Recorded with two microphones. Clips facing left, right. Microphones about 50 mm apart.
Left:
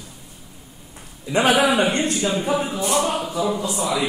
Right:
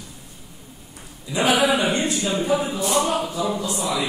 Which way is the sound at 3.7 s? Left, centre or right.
Left.